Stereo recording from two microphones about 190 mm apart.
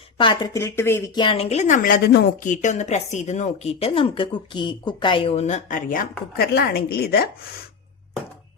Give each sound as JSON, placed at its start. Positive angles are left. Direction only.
{"t": 0.2, "sound": "speech", "side_deg": 25}